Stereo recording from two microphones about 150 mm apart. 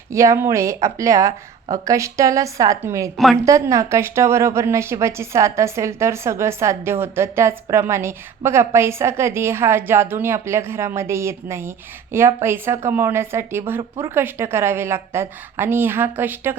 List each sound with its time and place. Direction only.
0.1 s a woman's voice: 20° right (ahead or behind)